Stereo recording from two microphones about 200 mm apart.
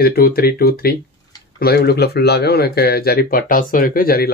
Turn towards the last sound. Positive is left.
turn(degrees=50)  # may be behind; listen again after turning